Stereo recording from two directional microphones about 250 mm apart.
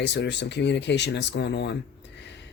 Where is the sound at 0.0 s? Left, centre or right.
Left.